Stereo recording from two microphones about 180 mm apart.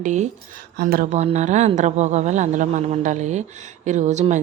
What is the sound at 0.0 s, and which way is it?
Speech, 40° right (ahead or behind).